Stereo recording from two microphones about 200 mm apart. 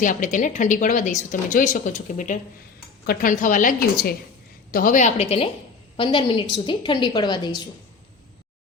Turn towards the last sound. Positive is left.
turn(degrees=20)  # may be behind; listen again after turning